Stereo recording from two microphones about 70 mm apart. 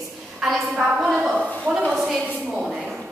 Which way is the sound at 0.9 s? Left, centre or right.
Centre.